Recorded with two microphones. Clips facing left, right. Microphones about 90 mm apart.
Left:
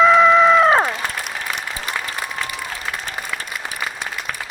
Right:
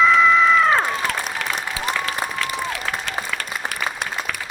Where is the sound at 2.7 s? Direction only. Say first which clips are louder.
Right 2 dB; 80° right.